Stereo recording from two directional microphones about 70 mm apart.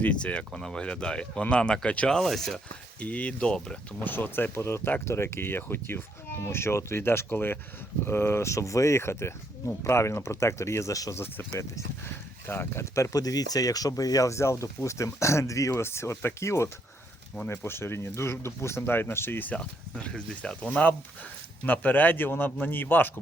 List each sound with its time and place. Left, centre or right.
0.0 s speech: centre
2.1 s speech: centre
3.0 s a man's voice: centre
4.0 s speech: left
11.1 s speech: left
15.7 s speech: left
19.5 s a man's voice: centre; by 23.1 s left